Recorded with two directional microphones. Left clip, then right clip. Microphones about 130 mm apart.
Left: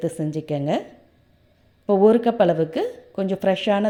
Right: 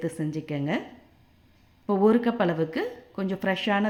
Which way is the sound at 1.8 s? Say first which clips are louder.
Left 6 dB; 25° left (ahead or behind).